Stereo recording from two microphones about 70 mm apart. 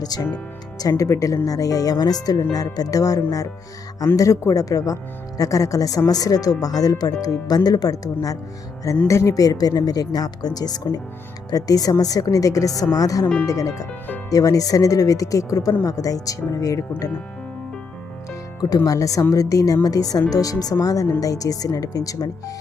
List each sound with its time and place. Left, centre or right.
0.0 s speech: left
0.8 s speech: left
9.0 s speech: left
9.3 s speech: left
18.9 s speech: left